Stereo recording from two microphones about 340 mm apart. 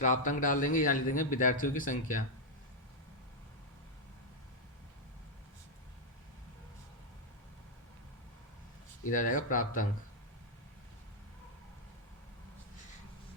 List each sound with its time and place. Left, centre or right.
0.0 s a man's voice: left
9.0 s a man's voice: left